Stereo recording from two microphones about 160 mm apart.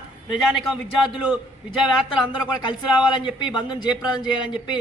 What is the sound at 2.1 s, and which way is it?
Speech, 5° right (ahead or behind).